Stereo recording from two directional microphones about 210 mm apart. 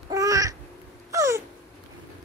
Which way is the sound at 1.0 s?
15° right (ahead or behind).